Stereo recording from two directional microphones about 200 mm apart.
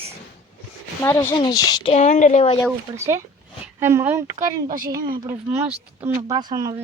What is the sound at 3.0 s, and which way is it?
A child's voice, 15° right (ahead or behind).